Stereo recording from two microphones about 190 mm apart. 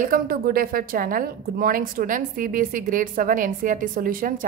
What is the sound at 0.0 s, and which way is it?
A woman's voice, 50° right (ahead or behind).